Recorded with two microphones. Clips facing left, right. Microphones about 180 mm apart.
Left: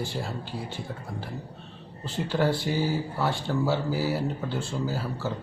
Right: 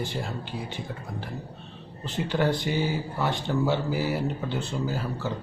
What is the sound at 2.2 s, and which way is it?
Speech, 5° right (ahead or behind).